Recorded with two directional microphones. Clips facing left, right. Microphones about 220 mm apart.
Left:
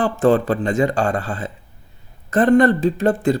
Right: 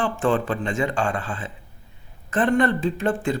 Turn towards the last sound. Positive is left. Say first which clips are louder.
# left 6 dB
turn(degrees=40)  # may be behind; listen again after turning